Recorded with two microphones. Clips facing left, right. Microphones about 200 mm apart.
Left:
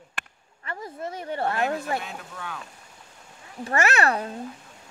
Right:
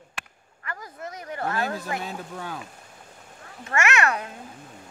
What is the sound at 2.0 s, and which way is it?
Speech, 35° right (ahead or behind).